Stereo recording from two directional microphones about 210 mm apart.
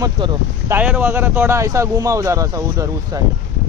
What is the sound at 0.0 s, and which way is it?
Speech, 20° right (ahead or behind).